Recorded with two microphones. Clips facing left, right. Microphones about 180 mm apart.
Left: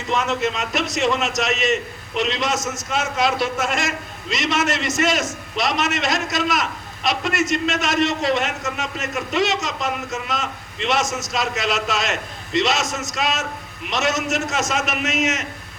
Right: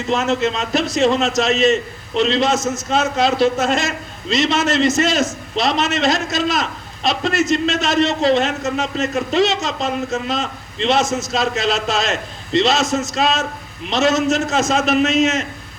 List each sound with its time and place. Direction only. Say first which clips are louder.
0.1 s a man's voice: right 3 dB; 25° right (ahead or behind)